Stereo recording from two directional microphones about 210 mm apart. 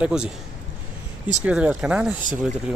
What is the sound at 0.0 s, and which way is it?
Speech, 5° right (ahead or behind).